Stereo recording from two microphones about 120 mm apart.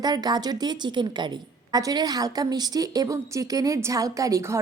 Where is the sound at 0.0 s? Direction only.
35° right (ahead or behind).